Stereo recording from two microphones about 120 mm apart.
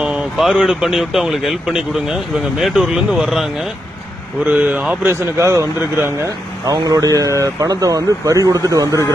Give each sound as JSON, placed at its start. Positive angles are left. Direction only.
{"t": 0.0, "sound": "speech", "side_deg": -5}
{"t": 5.4, "sound": "speech", "side_deg": -25}